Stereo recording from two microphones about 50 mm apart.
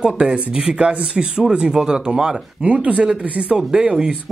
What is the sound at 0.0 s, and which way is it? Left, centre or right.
Speech, centre.